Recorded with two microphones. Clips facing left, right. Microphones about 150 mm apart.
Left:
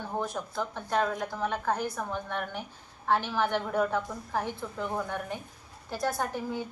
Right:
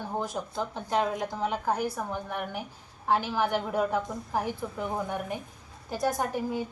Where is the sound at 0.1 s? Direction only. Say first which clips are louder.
Even; 15° right (ahead or behind).